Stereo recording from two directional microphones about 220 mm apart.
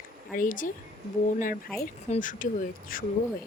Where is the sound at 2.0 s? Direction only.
35° left (ahead or behind).